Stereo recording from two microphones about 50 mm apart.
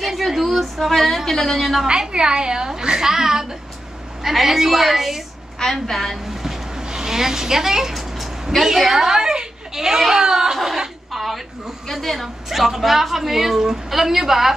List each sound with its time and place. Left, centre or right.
0.0 s speech: centre
1.9 s a woman's voice: centre
5.6 s a woman's voice: centre
6.3 s speech: centre